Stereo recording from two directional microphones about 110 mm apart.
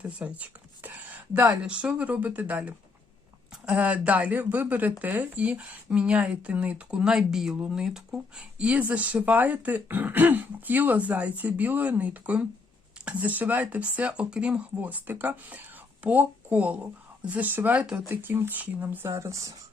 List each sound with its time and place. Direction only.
0.0 s speech: 10° right (ahead or behind)
19.1 s speech: 30° right (ahead or behind)